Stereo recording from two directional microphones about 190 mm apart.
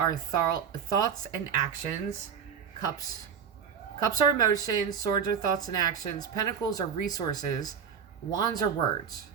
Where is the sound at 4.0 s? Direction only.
20° left (ahead or behind).